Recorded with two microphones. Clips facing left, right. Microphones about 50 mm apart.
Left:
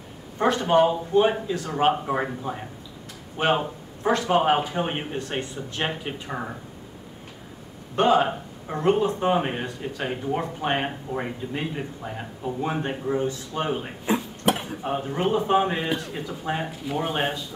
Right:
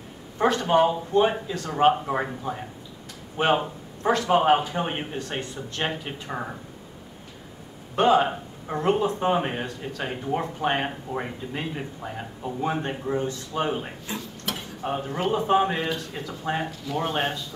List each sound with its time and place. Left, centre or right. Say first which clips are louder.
0.4 s speech: left 1 dB; centre
7.9 s speech: even; centre
14.0 s a sound: left 9 dB; left
14.8 s a man's voice: left 1 dB; centre